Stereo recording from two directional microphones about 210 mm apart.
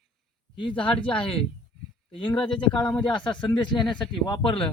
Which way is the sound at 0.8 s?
5° left (ahead or behind).